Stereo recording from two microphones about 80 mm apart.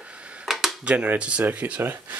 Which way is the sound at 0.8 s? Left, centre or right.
Centre.